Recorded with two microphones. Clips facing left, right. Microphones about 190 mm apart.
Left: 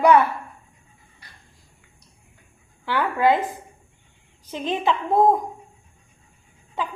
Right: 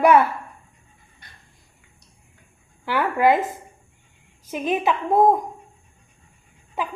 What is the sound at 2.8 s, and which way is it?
Speech, 15° right (ahead or behind).